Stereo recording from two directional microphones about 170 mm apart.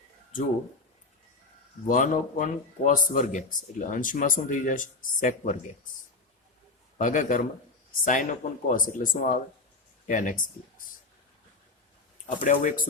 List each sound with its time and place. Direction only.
1.9 s speech: 50° left (ahead or behind)
7.0 s speech: 50° left (ahead or behind)
12.2 s speech: 50° left (ahead or behind)